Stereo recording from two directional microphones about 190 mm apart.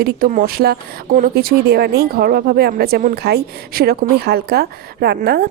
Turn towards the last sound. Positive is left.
turn(degrees=-50)  # may be behind; listen again after turning